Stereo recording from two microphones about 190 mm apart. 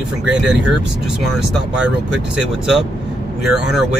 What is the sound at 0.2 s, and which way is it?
Speech, 5° right (ahead or behind).